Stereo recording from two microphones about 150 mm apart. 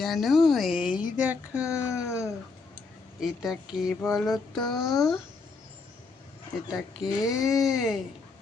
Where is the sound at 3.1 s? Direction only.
5° right (ahead or behind).